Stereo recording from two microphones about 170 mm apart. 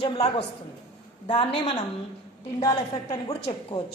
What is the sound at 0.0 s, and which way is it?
A woman's voice, 35° left (ahead or behind).